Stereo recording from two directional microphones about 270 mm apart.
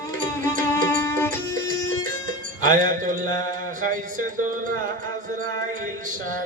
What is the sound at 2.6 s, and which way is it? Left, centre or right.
Music, right.